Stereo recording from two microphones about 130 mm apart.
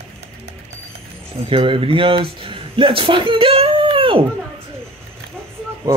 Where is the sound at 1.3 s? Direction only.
45° right (ahead or behind).